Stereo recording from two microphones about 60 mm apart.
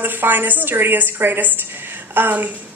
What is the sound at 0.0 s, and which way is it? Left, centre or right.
A woman's voice, right.